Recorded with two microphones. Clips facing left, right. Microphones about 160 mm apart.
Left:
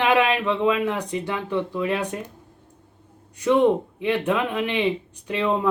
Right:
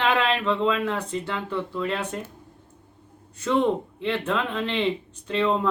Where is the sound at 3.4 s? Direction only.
15° left (ahead or behind).